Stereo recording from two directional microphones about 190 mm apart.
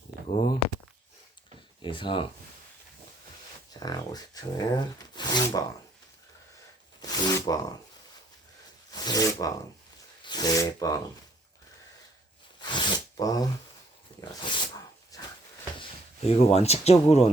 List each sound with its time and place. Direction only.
0.3 s a sound: 30° left (ahead or behind)
1.8 s speech: 25° left (ahead or behind)
3.8 s speech: 20° left (ahead or behind)
7.0 s speech: 20° left (ahead or behind)
8.9 s speech: 20° left (ahead or behind)
12.6 s a sound: 20° left (ahead or behind)
14.3 s dog: 25° left (ahead or behind)
16.2 s speech: 35° left (ahead or behind)